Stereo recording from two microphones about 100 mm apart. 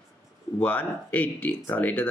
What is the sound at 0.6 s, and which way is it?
Speech, 15° left (ahead or behind).